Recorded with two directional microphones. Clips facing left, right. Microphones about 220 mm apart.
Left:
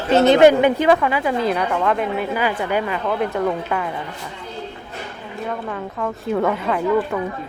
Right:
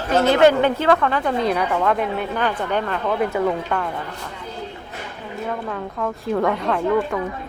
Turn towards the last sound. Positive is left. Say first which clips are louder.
# left 1 dB
turn(degrees=5)  # may be behind; listen again after turning